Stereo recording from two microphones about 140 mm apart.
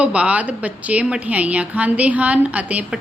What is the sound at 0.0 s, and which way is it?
A woman's voice, 10° right (ahead or behind).